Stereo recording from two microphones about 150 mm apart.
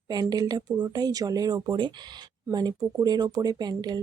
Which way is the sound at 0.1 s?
25° right (ahead or behind).